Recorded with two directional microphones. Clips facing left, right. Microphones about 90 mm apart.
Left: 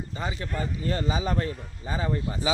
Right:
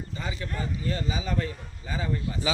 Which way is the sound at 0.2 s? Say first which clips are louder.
Left 3 dB; 30° left (ahead or behind).